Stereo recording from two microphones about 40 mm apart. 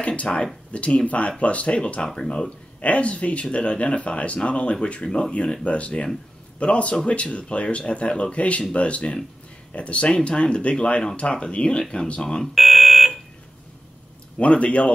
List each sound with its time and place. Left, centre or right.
0.0 s speech: left
2.0 s speech: centre
2.8 s speech: left; by 12.4 s centre
12.5 s smoke detector: centre
14.4 s speech: left